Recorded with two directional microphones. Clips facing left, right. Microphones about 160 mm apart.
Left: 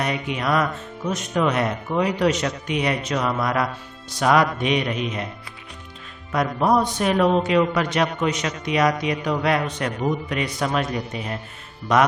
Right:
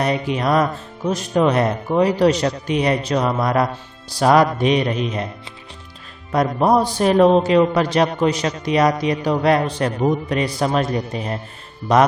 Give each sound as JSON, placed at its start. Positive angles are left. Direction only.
{"t": 0.0, "sound": "speech", "side_deg": -35}
{"t": 6.3, "sound": "speech", "side_deg": -35}